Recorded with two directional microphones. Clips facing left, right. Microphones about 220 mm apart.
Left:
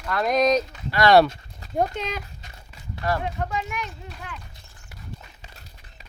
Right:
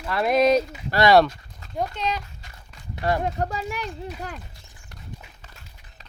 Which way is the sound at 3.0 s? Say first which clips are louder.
Right 2 dB; 35° right (ahead or behind).